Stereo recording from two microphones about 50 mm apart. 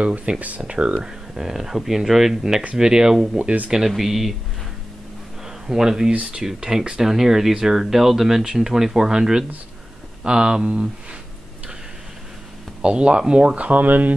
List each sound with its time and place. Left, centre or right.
0.0 s speech: right
1.3 s speech: centre
3.3 s speech: right
3.7 s speech: centre
5.7 s speech: centre
12.8 s speech: centre; by 14.1 s right